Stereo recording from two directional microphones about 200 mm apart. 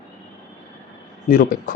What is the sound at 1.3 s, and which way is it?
Speech, 45° left (ahead or behind).